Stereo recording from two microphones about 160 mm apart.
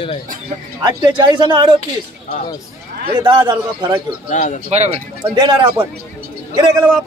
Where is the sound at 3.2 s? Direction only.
30° right (ahead or behind).